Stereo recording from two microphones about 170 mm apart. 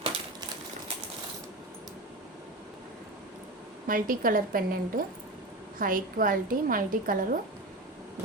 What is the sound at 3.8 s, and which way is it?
Speech, 55° right (ahead or behind).